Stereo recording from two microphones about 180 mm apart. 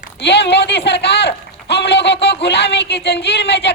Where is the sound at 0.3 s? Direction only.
70° left (ahead or behind).